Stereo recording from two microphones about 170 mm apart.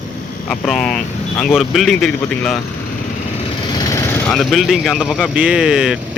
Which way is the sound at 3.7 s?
20° left (ahead or behind).